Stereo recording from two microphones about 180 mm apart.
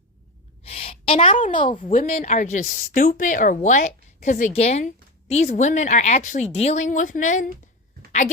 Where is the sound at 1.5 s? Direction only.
25° left (ahead or behind).